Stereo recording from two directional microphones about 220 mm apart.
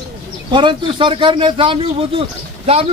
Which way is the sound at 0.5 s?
20° right (ahead or behind).